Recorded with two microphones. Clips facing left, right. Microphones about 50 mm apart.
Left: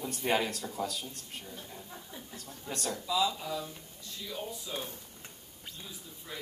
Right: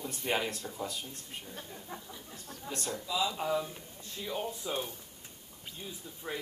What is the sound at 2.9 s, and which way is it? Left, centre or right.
A man's voice, right.